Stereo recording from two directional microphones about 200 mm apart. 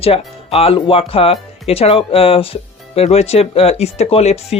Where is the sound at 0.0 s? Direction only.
30° left (ahead or behind).